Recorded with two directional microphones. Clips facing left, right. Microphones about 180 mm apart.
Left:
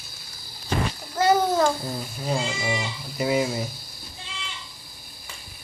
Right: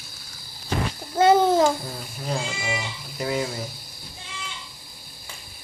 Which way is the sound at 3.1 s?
10° left (ahead or behind).